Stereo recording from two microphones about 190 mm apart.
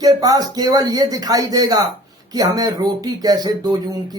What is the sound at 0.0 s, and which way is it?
Speech, 20° right (ahead or behind).